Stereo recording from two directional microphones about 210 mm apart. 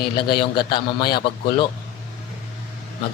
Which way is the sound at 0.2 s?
20° left (ahead or behind).